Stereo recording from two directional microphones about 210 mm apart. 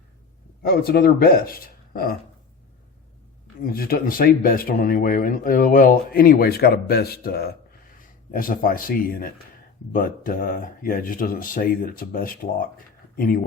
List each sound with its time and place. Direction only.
0.6 s speech: 45° left (ahead or behind)
3.6 s speech: 45° left (ahead or behind)